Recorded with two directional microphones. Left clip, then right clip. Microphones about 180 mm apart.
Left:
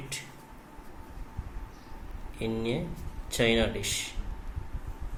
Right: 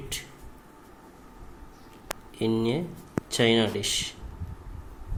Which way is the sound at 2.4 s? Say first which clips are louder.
Right 5 dB; 60° right (ahead or behind).